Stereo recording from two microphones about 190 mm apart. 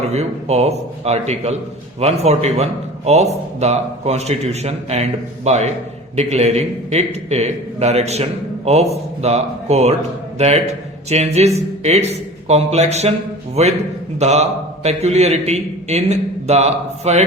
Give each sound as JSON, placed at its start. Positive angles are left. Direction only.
{"t": 0.1, "sound": "a man's voice", "side_deg": -35}